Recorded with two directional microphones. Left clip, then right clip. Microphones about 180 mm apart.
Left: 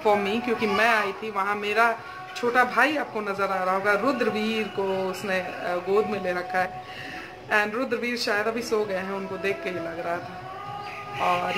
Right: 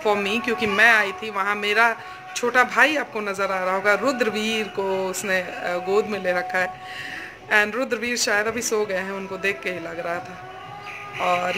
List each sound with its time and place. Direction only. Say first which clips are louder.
0.0 s a man's voice: right 1 dB; 15° right (ahead or behind)